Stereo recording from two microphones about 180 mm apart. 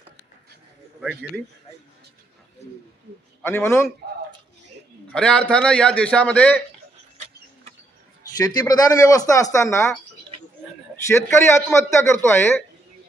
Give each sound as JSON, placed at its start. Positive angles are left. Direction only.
{"t": 3.4, "sound": "a man's voice", "side_deg": 10}
{"t": 5.1, "sound": "a man's voice", "side_deg": 5}
{"t": 8.4, "sound": "speech", "side_deg": 20}
{"t": 11.1, "sound": "a man's voice", "side_deg": 15}